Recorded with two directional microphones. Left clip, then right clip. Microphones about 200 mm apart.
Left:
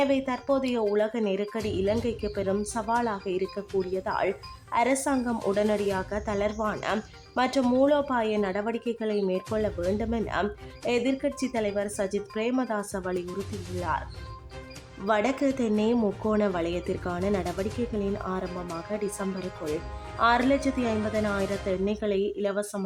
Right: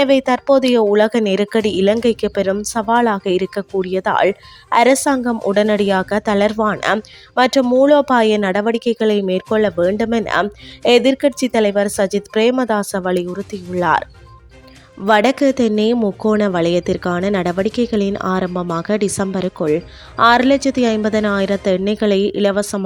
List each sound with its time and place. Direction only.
0.0 s speech: 45° right (ahead or behind)
15.0 s speech: 40° right (ahead or behind)